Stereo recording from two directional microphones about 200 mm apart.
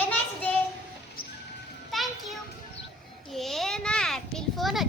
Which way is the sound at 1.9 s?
Centre (ahead or behind).